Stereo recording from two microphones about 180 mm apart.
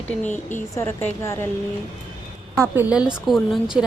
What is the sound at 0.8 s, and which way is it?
Speech, 15° left (ahead or behind).